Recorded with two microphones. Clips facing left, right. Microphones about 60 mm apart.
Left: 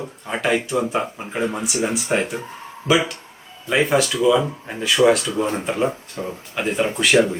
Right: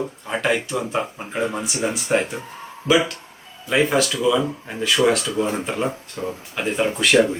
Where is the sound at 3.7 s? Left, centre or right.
Centre.